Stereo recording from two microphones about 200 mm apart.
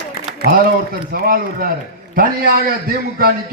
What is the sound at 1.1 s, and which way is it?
A man's voice, 45° right (ahead or behind).